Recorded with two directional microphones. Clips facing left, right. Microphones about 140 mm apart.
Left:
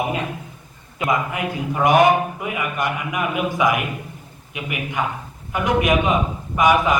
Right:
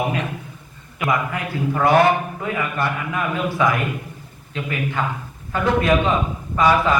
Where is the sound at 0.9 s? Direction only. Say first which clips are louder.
Even; 20° left (ahead or behind).